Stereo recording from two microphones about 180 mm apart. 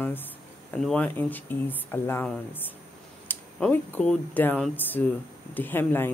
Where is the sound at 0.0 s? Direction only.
10° left (ahead or behind).